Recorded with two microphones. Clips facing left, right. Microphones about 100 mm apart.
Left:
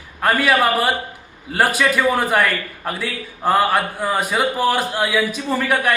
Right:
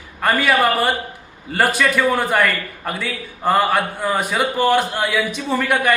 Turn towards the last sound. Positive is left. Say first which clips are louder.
# right 1 dB
turn(degrees=0)  # may be behind; listen again after turning